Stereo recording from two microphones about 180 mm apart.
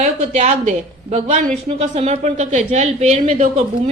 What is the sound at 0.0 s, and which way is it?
A woman's voice, 40° right (ahead or behind).